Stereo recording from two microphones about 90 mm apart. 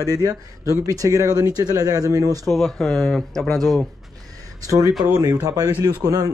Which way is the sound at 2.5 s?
Centre (ahead or behind).